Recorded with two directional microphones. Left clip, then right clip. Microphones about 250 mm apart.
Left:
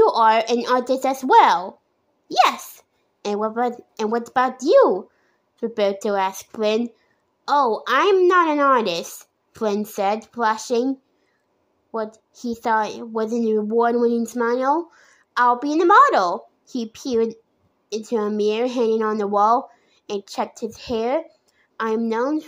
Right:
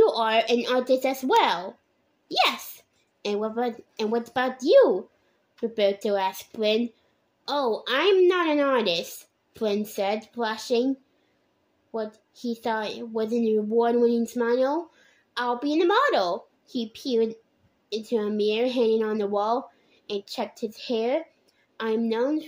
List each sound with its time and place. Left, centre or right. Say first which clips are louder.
0.0 s a woman's voice: left 6 dB; centre